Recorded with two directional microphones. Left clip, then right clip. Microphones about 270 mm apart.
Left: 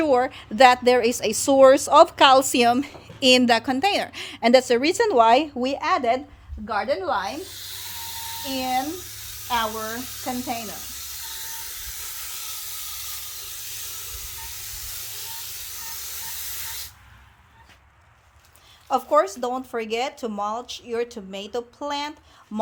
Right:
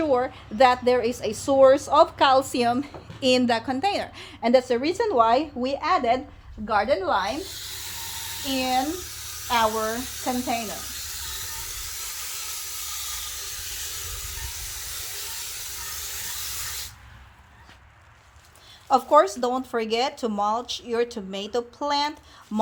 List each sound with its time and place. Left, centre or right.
0.0 s a woman's voice: left
6.7 s a woman's voice: left
7.4 s a sound: centre
8.5 s a woman's voice: left
9.0 s electric toothbrush: centre
9.8 s speech: centre
11.9 s steam: centre
14.5 s steam: centre
16.4 s spray: centre
18.9 s speech: centre